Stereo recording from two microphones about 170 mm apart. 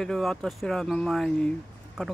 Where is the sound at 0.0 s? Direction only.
Centre (ahead or behind).